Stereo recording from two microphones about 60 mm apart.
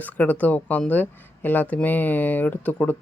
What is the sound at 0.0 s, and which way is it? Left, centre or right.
Speech, left.